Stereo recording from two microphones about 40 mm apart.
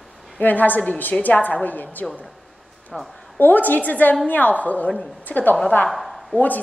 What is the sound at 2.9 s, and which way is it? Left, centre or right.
Speech, centre.